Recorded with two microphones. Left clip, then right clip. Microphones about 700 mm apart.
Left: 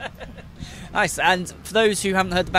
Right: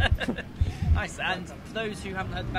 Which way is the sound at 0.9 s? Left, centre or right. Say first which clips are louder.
Left 12 dB; left.